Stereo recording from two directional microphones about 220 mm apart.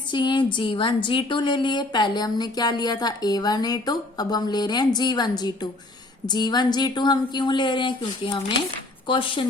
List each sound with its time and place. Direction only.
0.1 s a woman's voice: 20° left (ahead or behind)